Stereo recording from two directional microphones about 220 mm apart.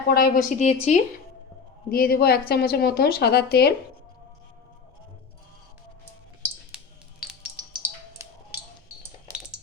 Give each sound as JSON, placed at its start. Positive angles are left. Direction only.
{"t": 0.1, "sound": "a woman's voice", "side_deg": 40}
{"t": 1.9, "sound": "speech", "side_deg": 45}
{"t": 6.7, "sound": "a sound", "side_deg": -5}
{"t": 7.5, "sound": "music", "side_deg": -15}